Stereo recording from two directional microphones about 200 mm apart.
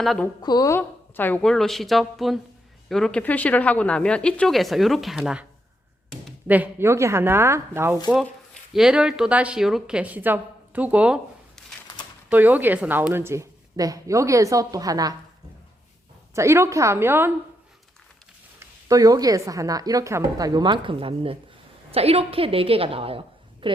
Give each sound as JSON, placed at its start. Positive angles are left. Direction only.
{"t": 0.0, "sound": "a woman's voice", "side_deg": 0}
{"t": 0.4, "sound": "a woman's voice", "side_deg": 20}
{"t": 16.3, "sound": "a woman's voice", "side_deg": -15}
{"t": 18.6, "sound": "a woman's voice", "side_deg": -15}